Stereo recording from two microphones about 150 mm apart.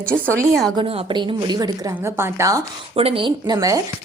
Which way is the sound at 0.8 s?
35° right (ahead or behind).